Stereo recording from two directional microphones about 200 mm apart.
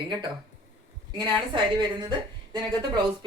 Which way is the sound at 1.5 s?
25° right (ahead or behind).